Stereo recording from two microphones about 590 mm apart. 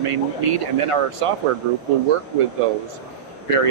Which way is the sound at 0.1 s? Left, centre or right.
Right.